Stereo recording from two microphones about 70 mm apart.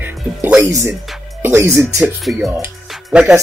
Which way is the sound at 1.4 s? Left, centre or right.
Right.